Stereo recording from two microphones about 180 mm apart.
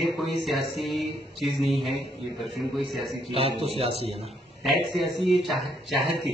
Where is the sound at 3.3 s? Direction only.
35° right (ahead or behind).